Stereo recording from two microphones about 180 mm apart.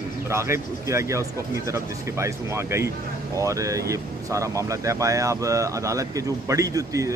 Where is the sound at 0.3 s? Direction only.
15° right (ahead or behind).